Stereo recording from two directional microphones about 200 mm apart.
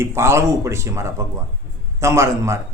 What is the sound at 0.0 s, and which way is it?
A man's voice, 10° right (ahead or behind).